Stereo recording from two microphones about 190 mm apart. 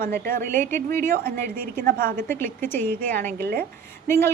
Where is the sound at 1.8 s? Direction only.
50° right (ahead or behind).